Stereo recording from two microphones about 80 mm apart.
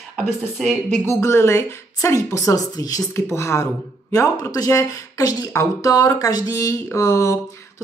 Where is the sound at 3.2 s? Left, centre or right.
Left.